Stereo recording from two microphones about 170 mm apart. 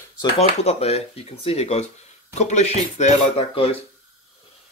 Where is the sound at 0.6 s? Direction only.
40° left (ahead or behind).